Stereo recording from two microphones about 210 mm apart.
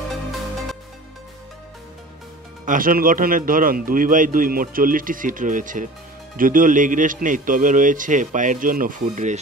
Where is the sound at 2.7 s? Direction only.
40° right (ahead or behind).